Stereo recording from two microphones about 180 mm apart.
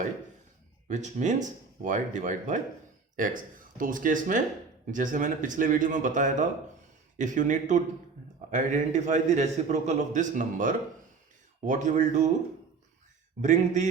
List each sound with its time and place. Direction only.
0.9 s a man's voice: 40° right (ahead or behind)
13.4 s a man's voice: 45° right (ahead or behind)